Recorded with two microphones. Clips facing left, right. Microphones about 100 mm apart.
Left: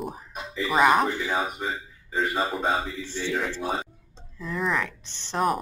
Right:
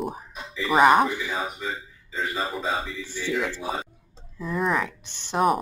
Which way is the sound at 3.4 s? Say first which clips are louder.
Left 1 dB; 10° right (ahead or behind).